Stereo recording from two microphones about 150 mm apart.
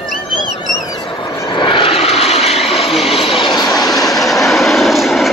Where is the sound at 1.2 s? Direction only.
30° left (ahead or behind); by 2.5 s 45° left (ahead or behind).